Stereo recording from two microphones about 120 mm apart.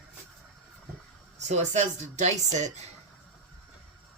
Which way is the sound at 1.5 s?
75° right (ahead or behind).